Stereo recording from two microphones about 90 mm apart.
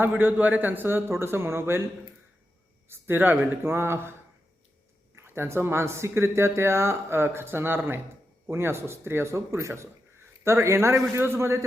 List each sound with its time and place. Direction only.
0.0 s speech: 20° right (ahead or behind)
2.9 s speech: 20° right (ahead or behind)
5.1 s speech: 25° right (ahead or behind)